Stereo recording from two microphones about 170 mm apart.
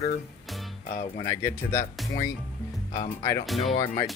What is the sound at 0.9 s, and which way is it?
Speech, 60° left (ahead or behind).